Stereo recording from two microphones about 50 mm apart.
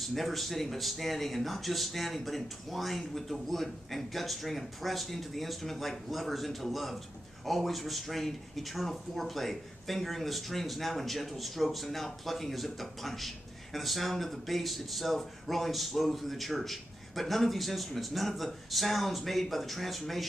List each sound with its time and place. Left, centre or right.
0.0 s speech: centre